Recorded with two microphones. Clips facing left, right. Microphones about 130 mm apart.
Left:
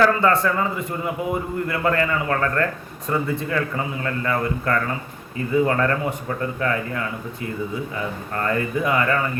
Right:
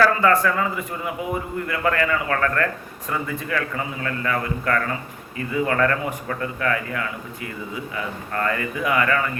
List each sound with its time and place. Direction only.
0.0 s a man's voice: 25° left (ahead or behind)
8.4 s a man's voice: 30° left (ahead or behind)